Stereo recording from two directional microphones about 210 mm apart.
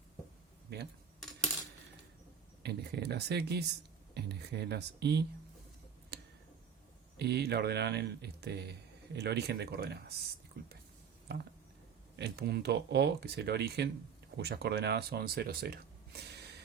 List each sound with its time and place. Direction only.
1.2 s coin: centre (ahead or behind)
2.6 s speech: 50° right (ahead or behind)
6.1 s tick: 50° right (ahead or behind)
7.2 s speech: 50° right (ahead or behind)
12.1 s speech: 50° right (ahead or behind)